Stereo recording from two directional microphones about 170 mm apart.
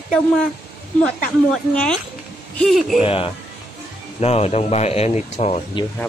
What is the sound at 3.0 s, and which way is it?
Speech, 30° left (ahead or behind).